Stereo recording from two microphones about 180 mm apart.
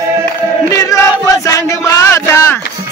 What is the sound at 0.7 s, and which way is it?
Chant, 20° left (ahead or behind).